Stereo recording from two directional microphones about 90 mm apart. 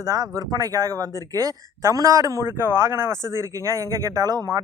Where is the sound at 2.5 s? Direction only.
25° right (ahead or behind).